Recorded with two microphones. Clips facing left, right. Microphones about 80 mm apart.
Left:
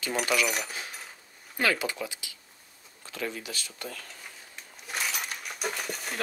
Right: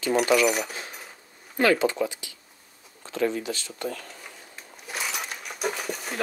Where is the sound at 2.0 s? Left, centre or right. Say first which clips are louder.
Right 9 dB; right.